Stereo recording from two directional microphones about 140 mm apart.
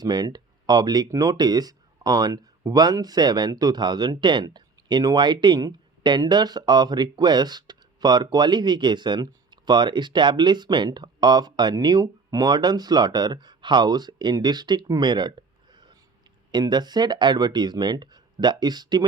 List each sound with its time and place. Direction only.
0.0 s speech: 30° right (ahead or behind)